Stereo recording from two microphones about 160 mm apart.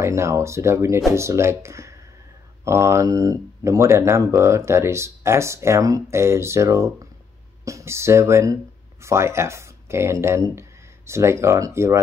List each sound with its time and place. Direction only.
0.0 s speech: 15° right (ahead or behind)